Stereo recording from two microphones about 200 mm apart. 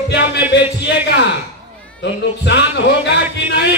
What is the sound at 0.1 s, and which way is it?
Speech, 60° left (ahead or behind).